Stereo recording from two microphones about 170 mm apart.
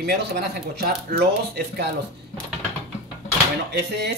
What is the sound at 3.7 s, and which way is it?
Speech, 75° right (ahead or behind).